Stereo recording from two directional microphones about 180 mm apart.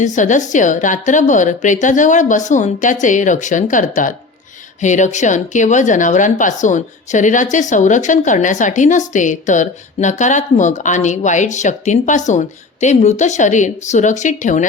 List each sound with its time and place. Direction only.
0.0 s a woman's voice: 45° left (ahead or behind)